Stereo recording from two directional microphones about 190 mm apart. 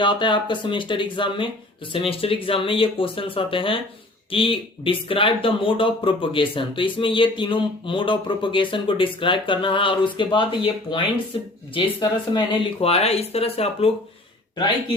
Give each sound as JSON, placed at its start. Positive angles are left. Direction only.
{"t": 0.0, "sound": "speech", "side_deg": 25}